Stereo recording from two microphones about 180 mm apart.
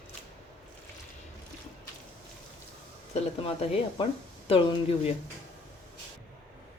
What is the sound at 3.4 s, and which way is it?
Speech, 30° left (ahead or behind).